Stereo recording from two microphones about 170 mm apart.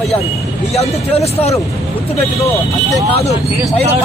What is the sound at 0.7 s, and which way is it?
Speech, 35° left (ahead or behind).